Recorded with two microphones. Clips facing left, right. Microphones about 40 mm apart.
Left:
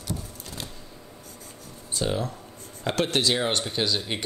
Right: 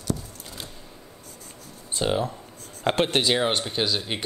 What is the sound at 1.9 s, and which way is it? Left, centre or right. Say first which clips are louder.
Speech: right 3 dB; right.